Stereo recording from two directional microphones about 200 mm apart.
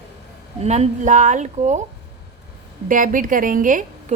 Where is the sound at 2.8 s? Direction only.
40° right (ahead or behind).